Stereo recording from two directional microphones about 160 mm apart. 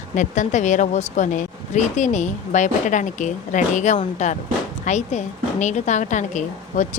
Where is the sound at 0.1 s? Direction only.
50° left (ahead or behind).